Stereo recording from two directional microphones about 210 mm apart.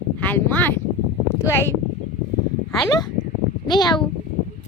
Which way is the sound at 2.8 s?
20° left (ahead or behind).